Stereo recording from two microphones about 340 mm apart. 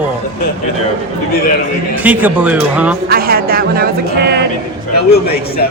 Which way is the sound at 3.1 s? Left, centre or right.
Right.